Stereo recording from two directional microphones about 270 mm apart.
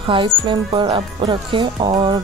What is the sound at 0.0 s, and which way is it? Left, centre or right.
Speech, centre.